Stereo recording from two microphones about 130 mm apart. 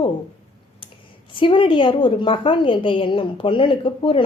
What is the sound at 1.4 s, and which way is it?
Speech, 40° left (ahead or behind).